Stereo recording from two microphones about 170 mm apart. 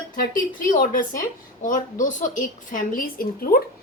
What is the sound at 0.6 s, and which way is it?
A woman's voice, 50° left (ahead or behind).